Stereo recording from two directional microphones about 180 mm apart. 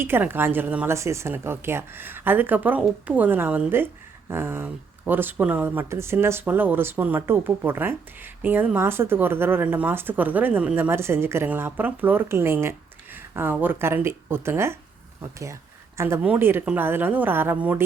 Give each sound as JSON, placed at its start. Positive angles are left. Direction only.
{"t": 0.0, "sound": "speech", "side_deg": -10}